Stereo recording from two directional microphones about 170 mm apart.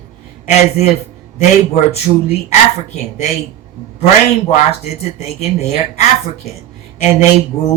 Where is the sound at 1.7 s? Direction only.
40° left (ahead or behind).